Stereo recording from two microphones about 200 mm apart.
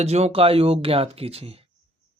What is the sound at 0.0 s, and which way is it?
Speech, 30° right (ahead or behind).